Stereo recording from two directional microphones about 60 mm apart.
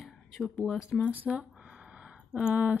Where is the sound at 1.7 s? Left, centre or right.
Centre.